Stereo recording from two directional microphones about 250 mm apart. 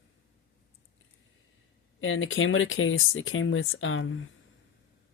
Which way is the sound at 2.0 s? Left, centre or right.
Left.